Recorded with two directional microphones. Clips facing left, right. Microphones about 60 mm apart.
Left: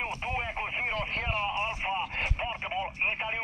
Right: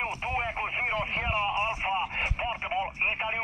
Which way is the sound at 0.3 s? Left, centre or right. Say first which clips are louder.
Right 2 dB; centre.